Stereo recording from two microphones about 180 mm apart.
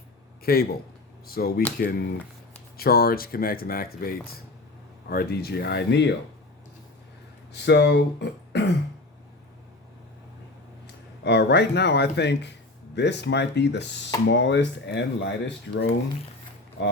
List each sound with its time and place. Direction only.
0.4 s speech: 60° left (ahead or behind)
7.5 s speech: 70° left (ahead or behind)
11.2 s speech: 70° left (ahead or behind)